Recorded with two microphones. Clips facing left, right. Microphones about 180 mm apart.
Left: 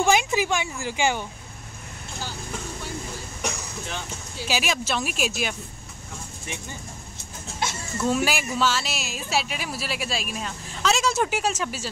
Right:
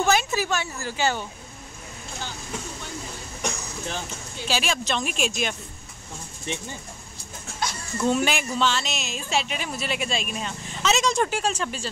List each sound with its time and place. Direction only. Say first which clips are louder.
0.0 s a woman's voice: left 1 dB; 15° left (ahead or behind)
4.4 s speech: even; 10° left (ahead or behind)
8.0 s speech: right 1 dB; 5° left (ahead or behind)